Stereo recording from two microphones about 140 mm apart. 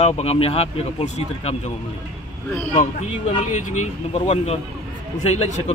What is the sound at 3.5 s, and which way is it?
Speech, 60° left (ahead or behind).